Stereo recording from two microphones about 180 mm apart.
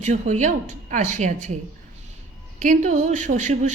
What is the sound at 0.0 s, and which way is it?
Speech, 40° right (ahead or behind).